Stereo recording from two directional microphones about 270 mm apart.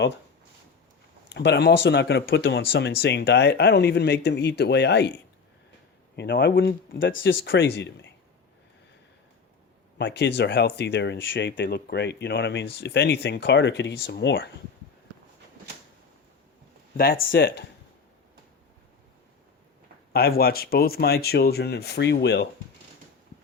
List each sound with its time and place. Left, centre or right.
1.3 s speech: left
6.1 s speech: left
10.0 s speech: left
17.0 s speech: left
20.1 s speech: left